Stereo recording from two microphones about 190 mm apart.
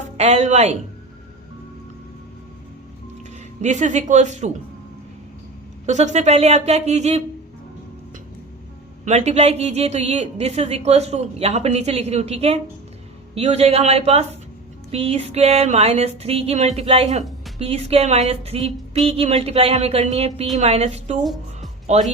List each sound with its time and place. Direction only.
0.2 s music: 35° right (ahead or behind)
3.6 s music: 40° right (ahead or behind)
5.8 s music: 40° right (ahead or behind)
9.0 s music: 35° right (ahead or behind)